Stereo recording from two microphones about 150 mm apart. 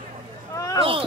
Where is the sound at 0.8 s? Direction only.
35° right (ahead or behind).